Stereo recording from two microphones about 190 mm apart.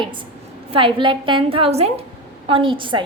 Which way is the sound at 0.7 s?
25° right (ahead or behind).